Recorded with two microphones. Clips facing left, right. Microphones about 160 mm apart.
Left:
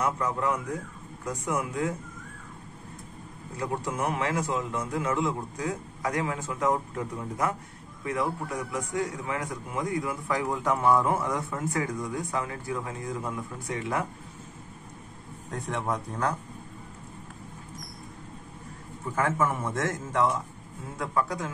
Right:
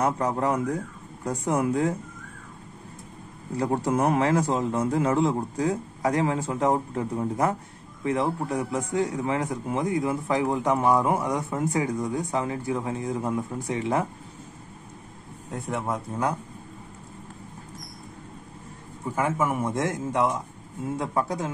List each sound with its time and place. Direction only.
0.0 s a man's voice: 35° right (ahead or behind)
3.5 s a man's voice: 35° right (ahead or behind)
15.5 s speech: 5° right (ahead or behind)
19.0 s a man's voice: 10° right (ahead or behind)